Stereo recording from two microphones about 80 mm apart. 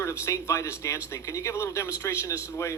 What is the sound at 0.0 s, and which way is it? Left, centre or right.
Speech, left.